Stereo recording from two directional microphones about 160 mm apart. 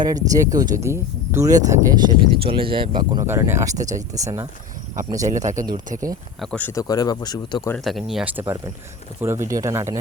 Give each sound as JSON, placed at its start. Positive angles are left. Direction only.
{"t": 0.0, "sound": "speech", "side_deg": -20}
{"t": 3.2, "sound": "speech", "side_deg": -15}
{"t": 5.3, "sound": "a man's voice", "side_deg": -50}
{"t": 6.4, "sound": "speech", "side_deg": 5}
{"t": 6.8, "sound": "speech", "side_deg": 25}
{"t": 7.9, "sound": "speech", "side_deg": 0}